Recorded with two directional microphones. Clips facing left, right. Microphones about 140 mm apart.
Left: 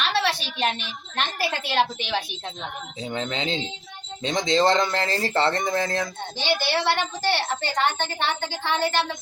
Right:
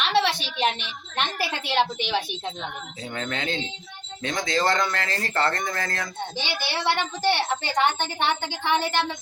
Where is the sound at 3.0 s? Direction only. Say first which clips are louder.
Left 3 dB; 20° left (ahead or behind).